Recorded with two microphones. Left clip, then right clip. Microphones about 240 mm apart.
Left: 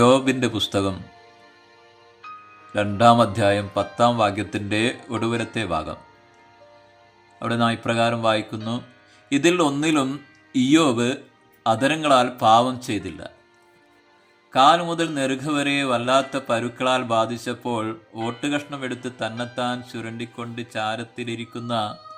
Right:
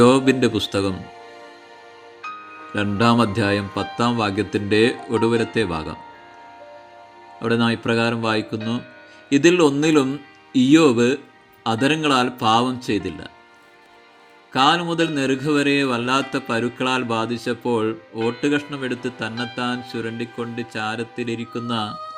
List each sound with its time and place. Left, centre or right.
0.0 s speech: centre
2.7 s speech: centre
7.4 s speech: centre
14.5 s speech: centre